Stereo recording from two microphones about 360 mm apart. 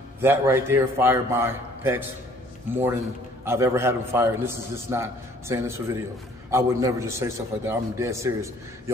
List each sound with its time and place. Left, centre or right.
0.2 s a man's voice: centre